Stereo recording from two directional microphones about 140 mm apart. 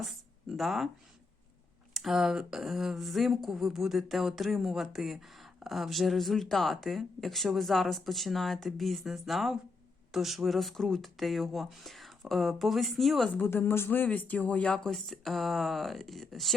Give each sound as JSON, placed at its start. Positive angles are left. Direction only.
{"t": 0.5, "sound": "a woman's voice", "side_deg": 0}
{"t": 1.9, "sound": "a woman's voice", "side_deg": 0}
{"t": 13.4, "sound": "a woman's voice", "side_deg": 15}